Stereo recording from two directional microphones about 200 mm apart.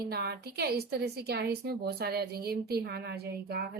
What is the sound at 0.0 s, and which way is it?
A woman's voice, 55° right (ahead or behind).